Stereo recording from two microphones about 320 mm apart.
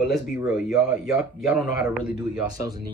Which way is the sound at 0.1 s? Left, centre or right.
Centre.